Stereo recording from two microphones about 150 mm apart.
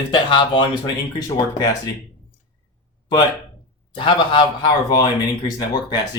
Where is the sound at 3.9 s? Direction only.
35° left (ahead or behind).